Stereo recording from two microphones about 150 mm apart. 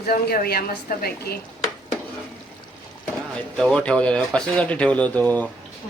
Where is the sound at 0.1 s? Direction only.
90° left.